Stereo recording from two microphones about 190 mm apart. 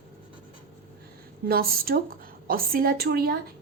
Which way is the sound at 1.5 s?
50° right (ahead or behind).